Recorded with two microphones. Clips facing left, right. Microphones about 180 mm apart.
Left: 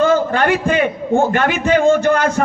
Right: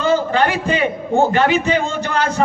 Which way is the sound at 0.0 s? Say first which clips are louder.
Left 2 dB; 50° left (ahead or behind).